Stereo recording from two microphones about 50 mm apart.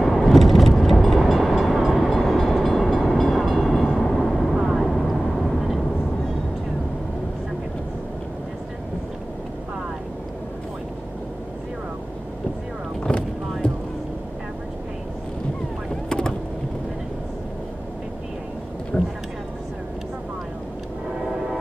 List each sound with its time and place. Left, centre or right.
0.0 s vehicle: centre
2.0 s train: centre
4.0 s vehicle: centre
13.0 s boat: centre
16.1 s boat: centre
18.9 s a sound: left